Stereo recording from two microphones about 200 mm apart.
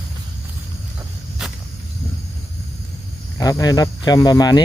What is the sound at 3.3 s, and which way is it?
Speech, 15° left (ahead or behind).